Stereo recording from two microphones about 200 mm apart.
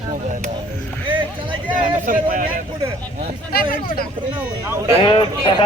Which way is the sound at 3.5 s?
50° left (ahead or behind).